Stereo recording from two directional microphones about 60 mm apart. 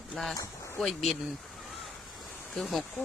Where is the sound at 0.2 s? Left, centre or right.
Centre.